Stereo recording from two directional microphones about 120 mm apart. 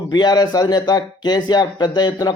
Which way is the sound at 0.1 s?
35° left (ahead or behind).